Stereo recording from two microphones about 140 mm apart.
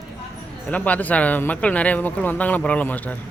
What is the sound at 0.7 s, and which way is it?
Speech, 10° left (ahead or behind).